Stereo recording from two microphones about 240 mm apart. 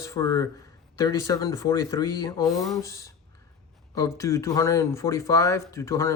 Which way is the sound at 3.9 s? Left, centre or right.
Centre.